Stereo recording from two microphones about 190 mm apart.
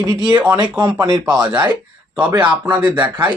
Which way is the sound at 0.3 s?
10° right (ahead or behind).